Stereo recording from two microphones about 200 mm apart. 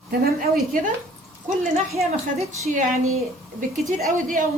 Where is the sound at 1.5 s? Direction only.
40° right (ahead or behind).